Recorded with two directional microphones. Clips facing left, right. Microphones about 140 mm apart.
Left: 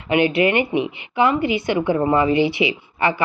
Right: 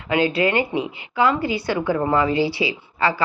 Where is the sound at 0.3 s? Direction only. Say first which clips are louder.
Left 2 dB; 20° left (ahead or behind).